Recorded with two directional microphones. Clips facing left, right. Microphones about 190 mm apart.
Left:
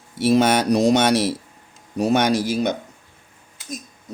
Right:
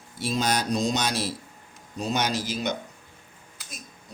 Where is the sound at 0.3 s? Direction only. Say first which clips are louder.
Left 10 dB; 70° left (ahead or behind).